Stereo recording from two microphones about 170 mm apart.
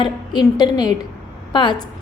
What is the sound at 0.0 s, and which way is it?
Speech, 25° left (ahead or behind).